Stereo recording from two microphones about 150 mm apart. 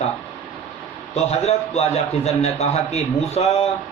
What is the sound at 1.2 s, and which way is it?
A man's voice, 45° left (ahead or behind).